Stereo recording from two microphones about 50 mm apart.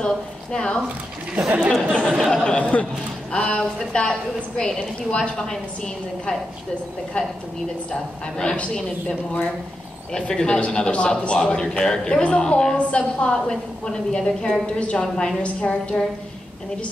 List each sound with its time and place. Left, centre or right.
0.0 s a woman's voice: centre
2.5 s a woman's voice: left
3.3 s a man's voice: centre
7.2 s a woman's voice: left
10.1 s a man's voice: centre
15.4 s a woman's voice: left